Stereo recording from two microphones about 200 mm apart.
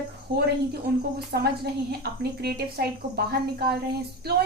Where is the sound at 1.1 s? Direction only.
50° right (ahead or behind).